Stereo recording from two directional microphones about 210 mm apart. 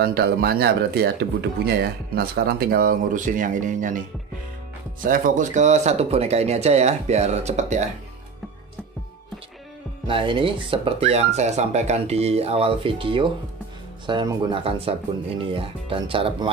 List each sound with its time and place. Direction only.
0.0 s speech: 45° right (ahead or behind)
5.0 s speech: 40° right (ahead or behind)
10.0 s speech: 25° right (ahead or behind)